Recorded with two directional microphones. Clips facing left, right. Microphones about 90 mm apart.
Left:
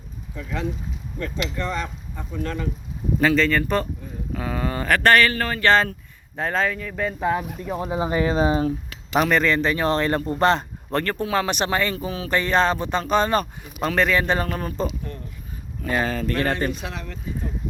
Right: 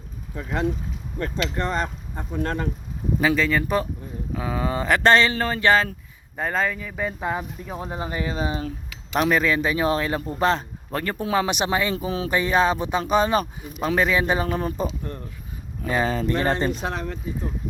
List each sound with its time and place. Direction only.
1.2 s speech: 45° right (ahead or behind)
3.2 s speech: 10° right (ahead or behind)
5.7 s a man's voice: 5° right (ahead or behind)
8.1 s speech: 35° left (ahead or behind)
9.1 s a man's voice: 5° right (ahead or behind)
11.0 s speech: 15° right (ahead or behind)
11.9 s speech: 30° right (ahead or behind)
12.3 s speech: 10° right (ahead or behind)
15.8 s speech: 20° right (ahead or behind)
16.8 s speech: 40° right (ahead or behind)